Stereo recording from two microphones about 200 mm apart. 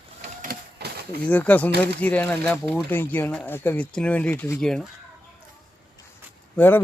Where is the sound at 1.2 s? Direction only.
5° left (ahead or behind).